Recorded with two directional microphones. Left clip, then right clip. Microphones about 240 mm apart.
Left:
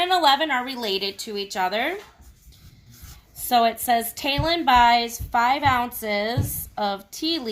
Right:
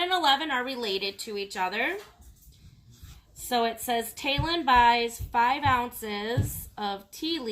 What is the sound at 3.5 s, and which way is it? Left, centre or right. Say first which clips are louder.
A woman's voice: left 8 dB; left.